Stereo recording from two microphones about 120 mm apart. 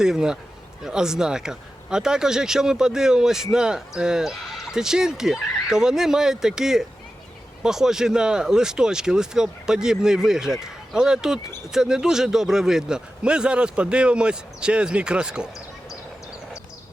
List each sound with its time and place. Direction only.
0.0 s speech: 5° right (ahead or behind)